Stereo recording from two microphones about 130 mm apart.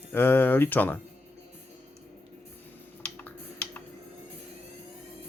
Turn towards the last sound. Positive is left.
turn(degrees=15)  # may be behind; listen again after turning